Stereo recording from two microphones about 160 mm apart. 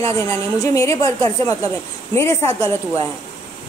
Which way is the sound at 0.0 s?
20° left (ahead or behind).